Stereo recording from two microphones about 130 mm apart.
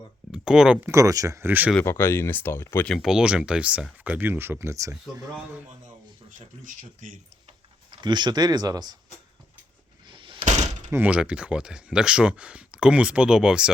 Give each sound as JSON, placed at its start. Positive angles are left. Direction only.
{"t": 0.3, "sound": "speech", "side_deg": -5}
{"t": 0.9, "sound": "speech", "side_deg": -25}
{"t": 1.8, "sound": "speech", "side_deg": 20}
{"t": 2.9, "sound": "speech", "side_deg": -5}
{"t": 6.7, "sound": "speech", "side_deg": -80}
{"t": 7.9, "sound": "speech", "side_deg": -35}
{"t": 10.1, "sound": "a sound", "side_deg": -40}
{"t": 10.9, "sound": "speech", "side_deg": -10}